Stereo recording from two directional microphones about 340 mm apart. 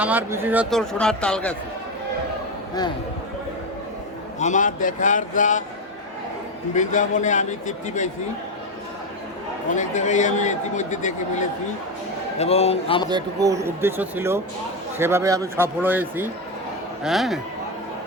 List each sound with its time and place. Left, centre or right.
0.0 s speech: centre
4.4 s a man's voice: left
6.7 s a man's voice: left
9.6 s a man's voice: left
13.1 s speech: centre